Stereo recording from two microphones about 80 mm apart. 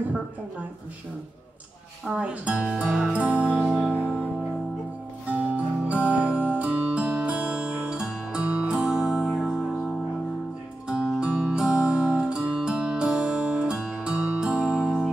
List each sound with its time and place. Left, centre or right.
2.0 s speech: centre
3.1 s music: centre
5.9 s music: centre